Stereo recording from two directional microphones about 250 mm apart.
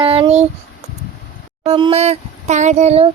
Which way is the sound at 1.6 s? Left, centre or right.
Right.